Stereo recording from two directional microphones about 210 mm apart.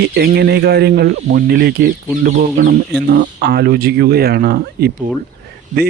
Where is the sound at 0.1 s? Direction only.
50° right (ahead or behind).